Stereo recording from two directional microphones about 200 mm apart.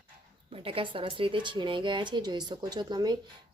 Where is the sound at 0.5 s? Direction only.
30° right (ahead or behind).